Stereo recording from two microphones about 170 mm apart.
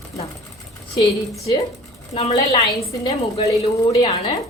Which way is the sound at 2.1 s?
35° left (ahead or behind).